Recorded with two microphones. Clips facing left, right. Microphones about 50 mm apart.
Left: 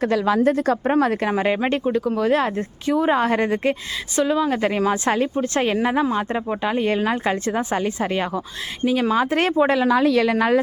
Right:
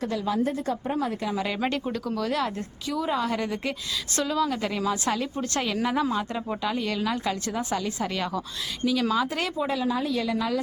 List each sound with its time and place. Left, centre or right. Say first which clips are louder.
0.0 s speech: left 8 dB; left
1.4 s speech: left 7 dB; left
4.1 s a woman's voice: left 6 dB; left
4.5 s speech: left 7 dB; left